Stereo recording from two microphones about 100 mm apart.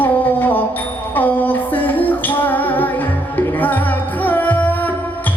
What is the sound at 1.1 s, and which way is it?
Music, 20° left (ahead or behind).